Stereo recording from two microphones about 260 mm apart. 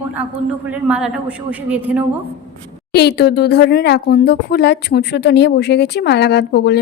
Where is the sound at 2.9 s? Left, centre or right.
Left.